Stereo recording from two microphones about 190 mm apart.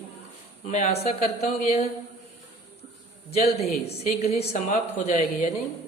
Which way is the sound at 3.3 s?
35° left (ahead or behind).